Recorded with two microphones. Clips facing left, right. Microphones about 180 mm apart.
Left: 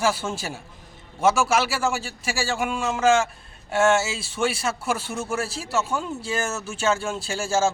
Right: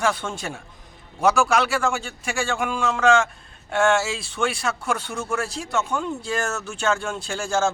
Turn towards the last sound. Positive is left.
turn(degrees=5)  # may be behind; listen again after turning